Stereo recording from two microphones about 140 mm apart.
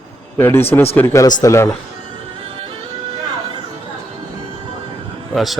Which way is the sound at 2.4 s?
40° right (ahead or behind).